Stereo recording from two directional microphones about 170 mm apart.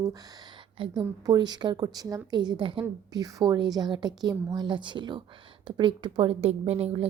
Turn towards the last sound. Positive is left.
turn(degrees=-35)  # may be behind; listen again after turning